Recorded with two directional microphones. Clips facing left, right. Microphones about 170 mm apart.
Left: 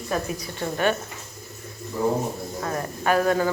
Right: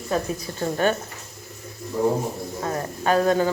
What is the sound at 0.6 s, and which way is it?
Speech, 35° right (ahead or behind).